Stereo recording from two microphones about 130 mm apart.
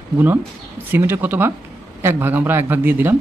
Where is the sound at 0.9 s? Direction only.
15° right (ahead or behind).